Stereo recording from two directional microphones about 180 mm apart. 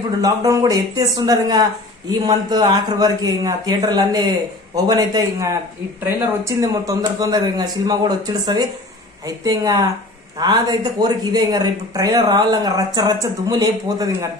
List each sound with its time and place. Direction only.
0.2 s speech: 20° right (ahead or behind)